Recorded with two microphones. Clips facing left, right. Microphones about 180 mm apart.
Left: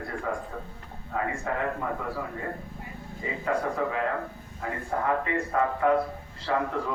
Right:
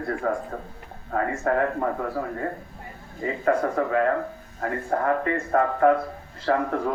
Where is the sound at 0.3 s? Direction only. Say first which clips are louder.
Right 5 dB; 50° right (ahead or behind).